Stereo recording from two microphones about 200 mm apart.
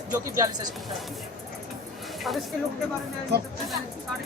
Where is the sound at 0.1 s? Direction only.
20° right (ahead or behind).